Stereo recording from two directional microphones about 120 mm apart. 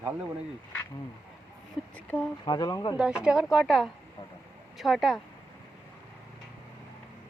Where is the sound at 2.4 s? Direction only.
35° left (ahead or behind).